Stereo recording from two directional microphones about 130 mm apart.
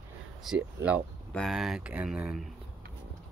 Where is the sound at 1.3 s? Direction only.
Centre (ahead or behind).